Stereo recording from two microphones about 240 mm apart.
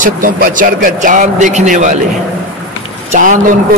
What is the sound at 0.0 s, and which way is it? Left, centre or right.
Speech, right.